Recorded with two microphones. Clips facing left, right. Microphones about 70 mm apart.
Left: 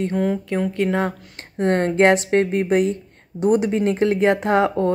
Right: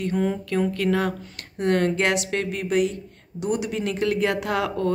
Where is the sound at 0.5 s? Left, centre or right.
Left.